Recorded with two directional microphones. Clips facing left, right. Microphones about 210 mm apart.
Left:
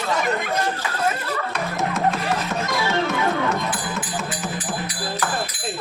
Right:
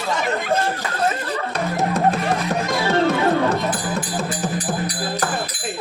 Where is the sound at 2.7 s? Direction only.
35° right (ahead or behind).